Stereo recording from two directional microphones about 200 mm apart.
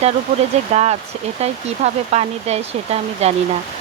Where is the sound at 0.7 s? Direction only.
35° right (ahead or behind).